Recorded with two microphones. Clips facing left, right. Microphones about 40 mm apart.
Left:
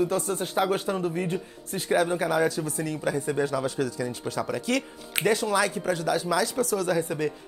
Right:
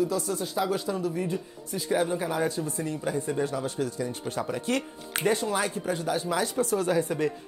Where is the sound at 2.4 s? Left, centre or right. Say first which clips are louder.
Left 2 dB; left.